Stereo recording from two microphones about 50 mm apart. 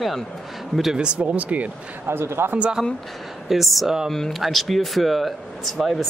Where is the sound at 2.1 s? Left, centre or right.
Right.